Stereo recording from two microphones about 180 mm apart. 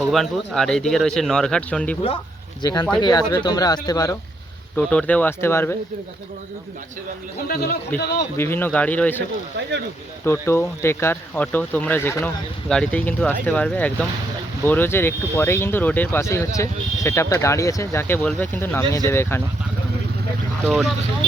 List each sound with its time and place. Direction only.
0.0 s speech: centre (ahead or behind)
2.6 s speech: 25° left (ahead or behind)
4.9 s speech: 5° left (ahead or behind)
7.4 s speech: 60° left (ahead or behind)
8.4 s speech: 10° left (ahead or behind)
10.2 s speech: 15° left (ahead or behind)